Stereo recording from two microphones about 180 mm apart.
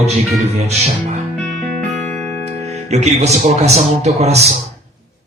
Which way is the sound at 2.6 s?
40° right (ahead or behind).